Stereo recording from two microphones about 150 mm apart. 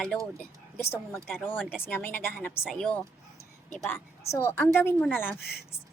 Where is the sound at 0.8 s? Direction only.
15° left (ahead or behind).